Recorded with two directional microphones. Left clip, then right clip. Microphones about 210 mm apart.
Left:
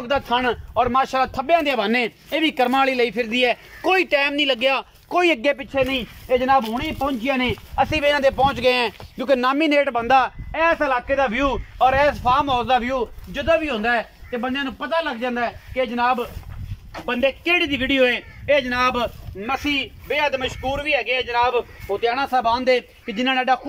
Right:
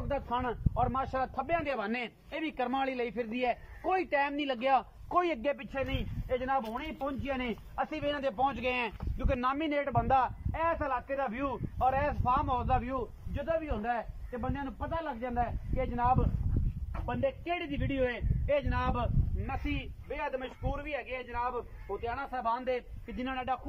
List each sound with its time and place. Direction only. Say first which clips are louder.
0.1 s speech: left 13 dB; 45° left (ahead or behind)
5.8 s a man's voice: left 15 dB; 20° left (ahead or behind)